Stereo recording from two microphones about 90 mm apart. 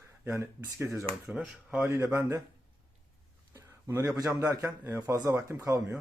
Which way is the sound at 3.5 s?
35° right (ahead or behind).